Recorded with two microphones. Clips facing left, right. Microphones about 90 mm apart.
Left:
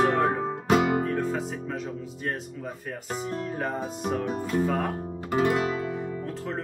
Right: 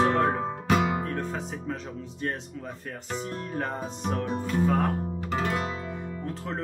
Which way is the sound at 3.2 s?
5° left (ahead or behind).